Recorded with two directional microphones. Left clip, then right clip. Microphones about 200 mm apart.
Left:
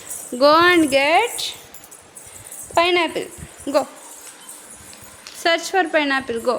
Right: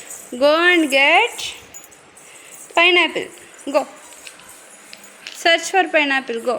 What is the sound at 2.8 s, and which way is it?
A woman's voice, 5° right (ahead or behind).